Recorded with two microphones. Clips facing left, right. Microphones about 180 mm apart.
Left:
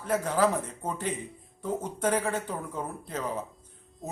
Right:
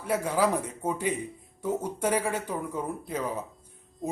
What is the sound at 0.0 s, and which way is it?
Speech, 10° right (ahead or behind).